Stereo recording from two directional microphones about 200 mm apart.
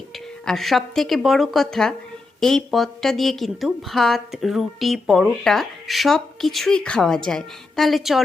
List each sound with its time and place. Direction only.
0.4 s a woman's voice: centre (ahead or behind)